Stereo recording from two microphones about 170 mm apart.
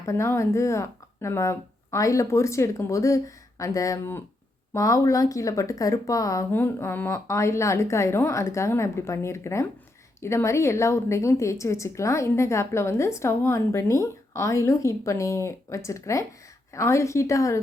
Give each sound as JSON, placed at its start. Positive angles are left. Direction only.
{"t": 0.0, "sound": "a woman's voice", "side_deg": 15}